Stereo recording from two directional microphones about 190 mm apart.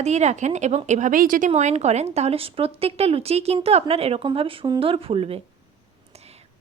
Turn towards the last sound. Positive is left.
turn(degrees=-35)  # may be behind; listen again after turning